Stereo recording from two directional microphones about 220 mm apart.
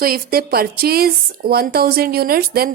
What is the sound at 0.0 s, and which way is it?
Speech, 40° right (ahead or behind).